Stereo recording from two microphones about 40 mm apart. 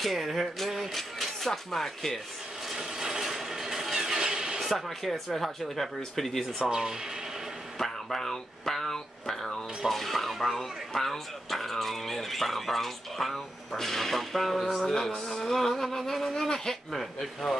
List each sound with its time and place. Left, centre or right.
0.0 s speech: centre
2.7 s vehicle: centre
4.6 s speech: centre
6.7 s speech: centre
7.8 s speech: centre
16.3 s speech: centre
16.9 s speech: centre